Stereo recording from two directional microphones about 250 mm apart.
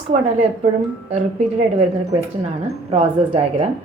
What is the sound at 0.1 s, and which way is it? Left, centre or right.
Speech, right.